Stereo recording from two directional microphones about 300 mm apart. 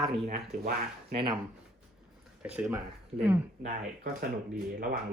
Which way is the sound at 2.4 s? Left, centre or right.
Centre.